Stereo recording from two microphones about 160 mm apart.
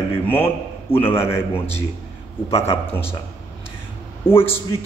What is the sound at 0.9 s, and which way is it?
Speech, 15° left (ahead or behind).